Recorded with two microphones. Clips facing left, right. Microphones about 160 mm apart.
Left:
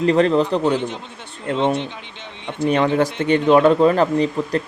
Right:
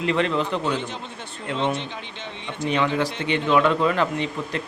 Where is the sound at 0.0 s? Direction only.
40° left (ahead or behind).